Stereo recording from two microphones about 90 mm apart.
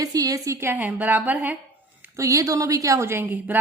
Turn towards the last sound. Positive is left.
turn(degrees=-20)  # may be behind; listen again after turning